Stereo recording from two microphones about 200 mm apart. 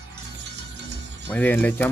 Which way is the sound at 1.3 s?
5° left (ahead or behind).